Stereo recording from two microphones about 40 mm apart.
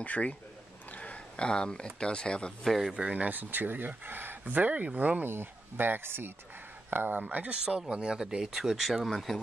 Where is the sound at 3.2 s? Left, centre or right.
Right.